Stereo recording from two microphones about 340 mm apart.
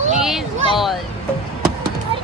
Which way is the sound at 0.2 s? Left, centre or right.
Centre.